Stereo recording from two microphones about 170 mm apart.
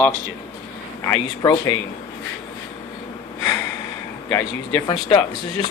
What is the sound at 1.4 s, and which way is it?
Speech, 20° left (ahead or behind).